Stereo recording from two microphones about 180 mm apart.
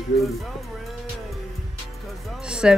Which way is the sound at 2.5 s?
5° right (ahead or behind).